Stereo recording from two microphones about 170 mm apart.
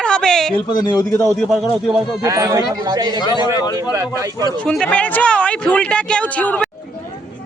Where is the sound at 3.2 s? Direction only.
25° left (ahead or behind).